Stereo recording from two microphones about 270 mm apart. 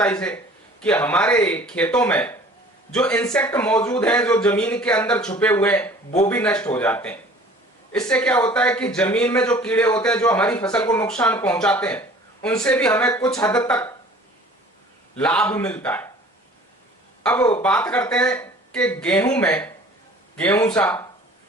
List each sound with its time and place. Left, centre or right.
0.0 s a man's voice: centre
15.1 s a man's voice: centre
17.2 s a man's voice: centre